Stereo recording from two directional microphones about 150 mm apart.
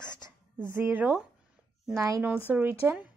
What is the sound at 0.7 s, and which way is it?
Speech, 15° right (ahead or behind).